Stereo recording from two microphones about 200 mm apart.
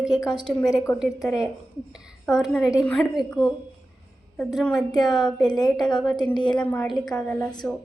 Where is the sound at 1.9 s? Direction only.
5° right (ahead or behind).